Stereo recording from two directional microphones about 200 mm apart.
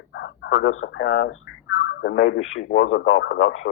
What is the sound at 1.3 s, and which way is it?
Speech, 80° left.